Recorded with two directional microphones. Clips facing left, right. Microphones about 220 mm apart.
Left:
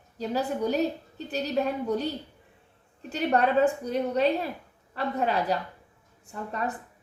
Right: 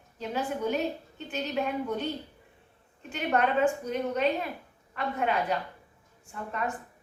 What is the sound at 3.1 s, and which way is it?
A woman's voice, 35° left (ahead or behind).